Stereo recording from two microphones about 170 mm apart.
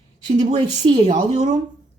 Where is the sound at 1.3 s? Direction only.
45° right (ahead or behind).